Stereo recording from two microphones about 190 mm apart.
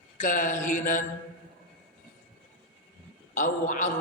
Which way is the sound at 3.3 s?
45° left (ahead or behind).